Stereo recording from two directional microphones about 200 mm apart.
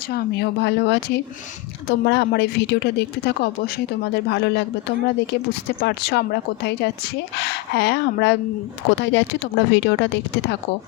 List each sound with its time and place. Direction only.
0.1 s speech: 60° left (ahead or behind)